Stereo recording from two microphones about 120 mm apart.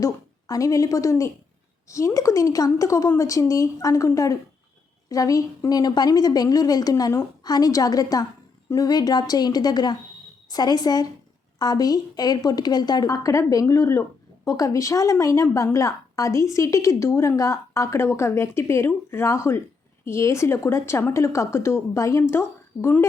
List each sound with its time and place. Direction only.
0.0 s a woman's voice: 30° left (ahead or behind)